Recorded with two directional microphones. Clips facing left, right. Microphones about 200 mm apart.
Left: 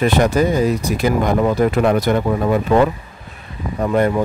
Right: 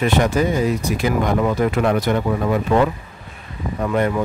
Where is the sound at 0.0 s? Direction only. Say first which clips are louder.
Left 3 dB; 35° left (ahead or behind).